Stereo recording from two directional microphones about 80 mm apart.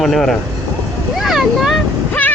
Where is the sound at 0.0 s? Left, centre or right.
Centre.